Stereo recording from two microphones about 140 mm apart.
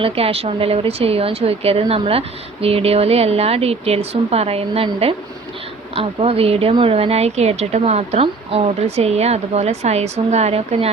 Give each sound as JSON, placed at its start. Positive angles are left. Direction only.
{"t": 0.0, "sound": "speech", "side_deg": -45}
{"t": 5.9, "sound": "speech", "side_deg": -45}